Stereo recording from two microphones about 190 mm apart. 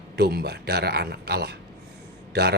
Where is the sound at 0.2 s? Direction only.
55° right (ahead or behind).